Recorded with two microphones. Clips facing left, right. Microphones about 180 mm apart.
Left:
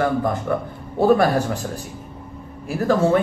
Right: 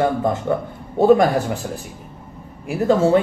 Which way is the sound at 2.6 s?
20° right (ahead or behind).